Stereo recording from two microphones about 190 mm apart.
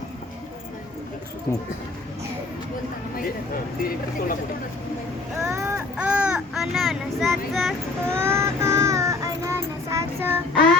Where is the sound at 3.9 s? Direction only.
50° left (ahead or behind).